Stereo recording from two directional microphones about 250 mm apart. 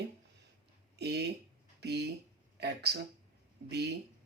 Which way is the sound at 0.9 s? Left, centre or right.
Right.